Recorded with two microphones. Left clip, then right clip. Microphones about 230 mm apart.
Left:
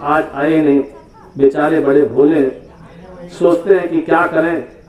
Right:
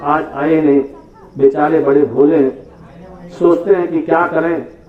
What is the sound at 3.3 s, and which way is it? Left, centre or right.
Speech, centre.